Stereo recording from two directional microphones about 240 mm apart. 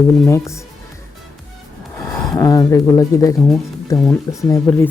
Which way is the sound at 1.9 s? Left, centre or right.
Centre.